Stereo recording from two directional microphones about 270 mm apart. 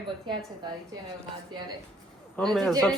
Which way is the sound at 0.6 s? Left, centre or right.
Centre.